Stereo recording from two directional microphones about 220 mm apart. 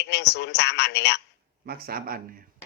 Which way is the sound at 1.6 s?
45° right (ahead or behind).